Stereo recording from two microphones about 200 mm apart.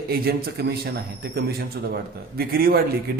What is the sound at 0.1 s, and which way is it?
A man's voice, 50° right (ahead or behind).